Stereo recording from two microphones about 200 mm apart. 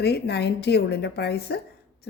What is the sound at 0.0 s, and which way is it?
A woman's voice, 55° left (ahead or behind).